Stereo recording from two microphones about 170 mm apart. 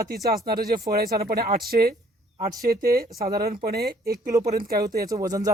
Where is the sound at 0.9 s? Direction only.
65° right (ahead or behind).